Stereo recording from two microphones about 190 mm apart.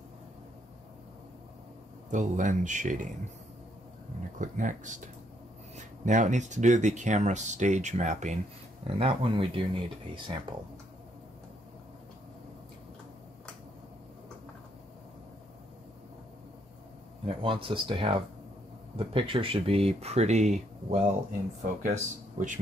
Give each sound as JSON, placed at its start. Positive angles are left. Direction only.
{"t": 2.0, "sound": "speech", "side_deg": -40}
{"t": 4.4, "sound": "speech", "side_deg": -40}
{"t": 17.3, "sound": "speech", "side_deg": -30}